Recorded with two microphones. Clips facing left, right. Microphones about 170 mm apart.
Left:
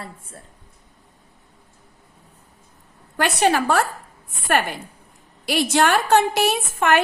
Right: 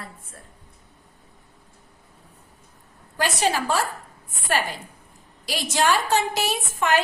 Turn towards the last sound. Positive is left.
turn(degrees=60)  # may be behind; listen again after turning